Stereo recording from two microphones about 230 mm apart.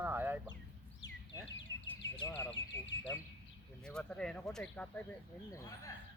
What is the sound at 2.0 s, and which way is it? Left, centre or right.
Speech, centre.